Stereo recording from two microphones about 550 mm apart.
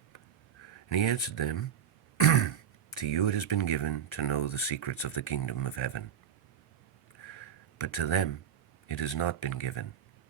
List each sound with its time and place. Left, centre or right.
0.9 s speech: left
2.1 s throat clearing: left
3.0 s speech: left
7.3 s a sound: left
8.9 s speech: left